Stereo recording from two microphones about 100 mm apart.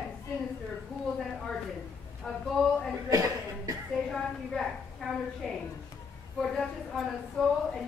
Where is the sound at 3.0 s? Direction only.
35° right (ahead or behind).